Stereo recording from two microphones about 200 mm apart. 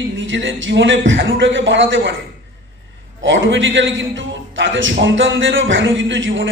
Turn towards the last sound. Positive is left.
turn(degrees=-70)  # may be behind; listen again after turning